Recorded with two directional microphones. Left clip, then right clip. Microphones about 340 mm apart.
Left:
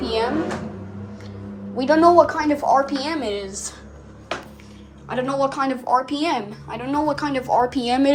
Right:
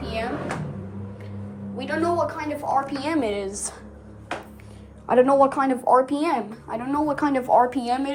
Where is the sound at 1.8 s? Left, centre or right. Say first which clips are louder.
Left 10 dB; left.